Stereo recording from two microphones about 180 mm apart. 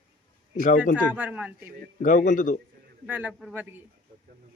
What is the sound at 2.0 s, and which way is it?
Speech, 45° left (ahead or behind).